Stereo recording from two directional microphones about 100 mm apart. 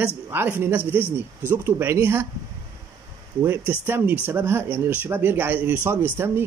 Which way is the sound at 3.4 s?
20° right (ahead or behind).